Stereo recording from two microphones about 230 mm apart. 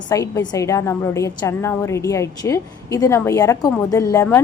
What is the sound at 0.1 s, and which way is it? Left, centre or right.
A woman's voice, centre.